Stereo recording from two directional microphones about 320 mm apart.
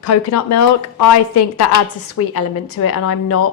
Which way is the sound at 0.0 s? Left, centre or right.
Left.